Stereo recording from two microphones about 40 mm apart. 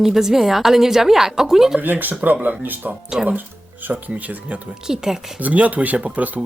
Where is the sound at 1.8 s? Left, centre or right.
Right.